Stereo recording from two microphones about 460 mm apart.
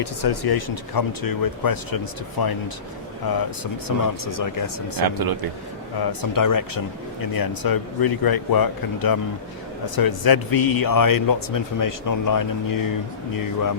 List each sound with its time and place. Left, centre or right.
0.0 s speech: left
4.9 s speech: right
6.0 s speech: left